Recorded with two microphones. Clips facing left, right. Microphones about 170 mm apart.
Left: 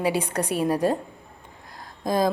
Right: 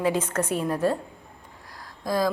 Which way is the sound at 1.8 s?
20° left (ahead or behind).